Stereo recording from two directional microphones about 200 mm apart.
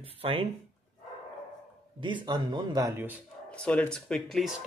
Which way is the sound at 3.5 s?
5° left (ahead or behind).